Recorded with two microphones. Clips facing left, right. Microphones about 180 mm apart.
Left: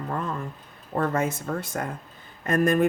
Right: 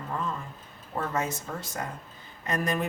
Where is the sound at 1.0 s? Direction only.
55° left (ahead or behind).